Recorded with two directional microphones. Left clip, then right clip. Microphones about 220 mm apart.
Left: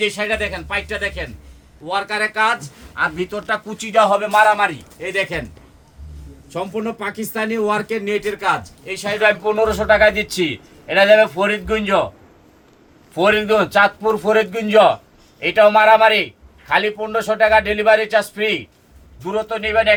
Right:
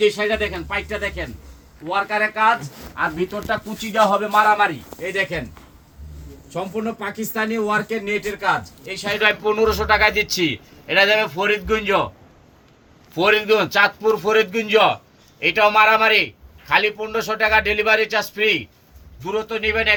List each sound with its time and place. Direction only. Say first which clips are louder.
0.0 s speech: right 1 dB; 40° left (ahead or behind)
6.5 s speech: left 2 dB; 55° left (ahead or behind)
9.2 s a man's voice: left 2 dB; 20° left (ahead or behind)
13.1 s a man's voice: left 2 dB; 10° left (ahead or behind)